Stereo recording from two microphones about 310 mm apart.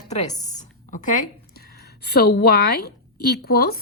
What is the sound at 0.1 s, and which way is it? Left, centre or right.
A woman's voice, left.